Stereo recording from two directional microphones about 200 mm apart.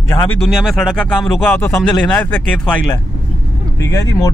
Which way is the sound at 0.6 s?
Centre (ahead or behind).